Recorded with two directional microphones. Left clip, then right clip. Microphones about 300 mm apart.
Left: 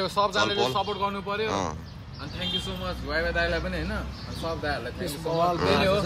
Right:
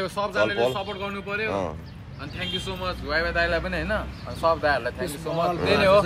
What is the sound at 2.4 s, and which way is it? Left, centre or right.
A man's voice, centre.